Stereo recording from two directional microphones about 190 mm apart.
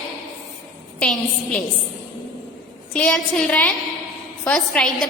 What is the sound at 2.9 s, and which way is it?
A woman's voice, 5° left (ahead or behind).